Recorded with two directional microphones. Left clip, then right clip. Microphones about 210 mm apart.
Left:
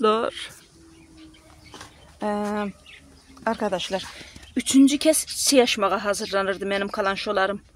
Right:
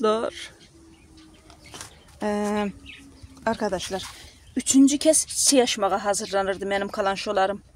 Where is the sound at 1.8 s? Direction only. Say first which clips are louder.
Even; 15° right (ahead or behind).